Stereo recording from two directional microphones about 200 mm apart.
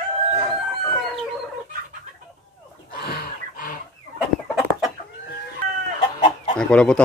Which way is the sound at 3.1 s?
45° left (ahead or behind).